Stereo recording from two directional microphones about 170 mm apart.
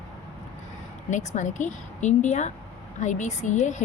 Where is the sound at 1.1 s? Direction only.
45° left (ahead or behind).